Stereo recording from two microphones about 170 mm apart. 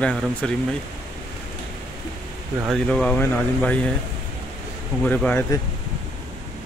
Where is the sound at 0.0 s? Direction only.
5° left (ahead or behind).